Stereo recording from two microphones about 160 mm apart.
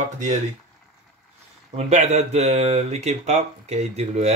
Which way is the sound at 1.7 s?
45° right (ahead or behind).